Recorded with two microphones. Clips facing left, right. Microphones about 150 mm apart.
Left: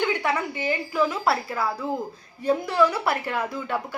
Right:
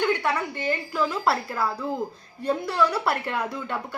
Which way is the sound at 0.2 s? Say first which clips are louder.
Left 1 dB; 10° left (ahead or behind).